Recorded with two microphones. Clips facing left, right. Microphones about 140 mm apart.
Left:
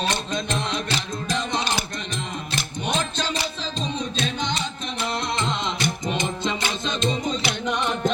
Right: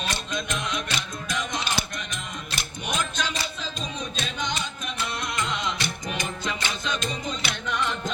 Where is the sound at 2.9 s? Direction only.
30° left (ahead or behind).